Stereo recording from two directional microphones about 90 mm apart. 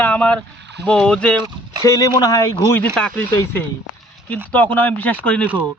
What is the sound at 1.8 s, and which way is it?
Speech, 40° left (ahead or behind).